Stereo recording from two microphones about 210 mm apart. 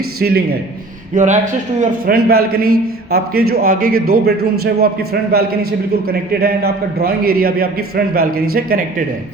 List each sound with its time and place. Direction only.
0.2 s a man's voice: 50° right (ahead or behind)
1.1 s a man's voice: 35° right (ahead or behind)
2.6 s speech: 90° right
3.1 s a man's voice: 45° right (ahead or behind)